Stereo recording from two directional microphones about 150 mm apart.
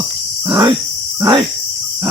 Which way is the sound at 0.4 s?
30° right (ahead or behind).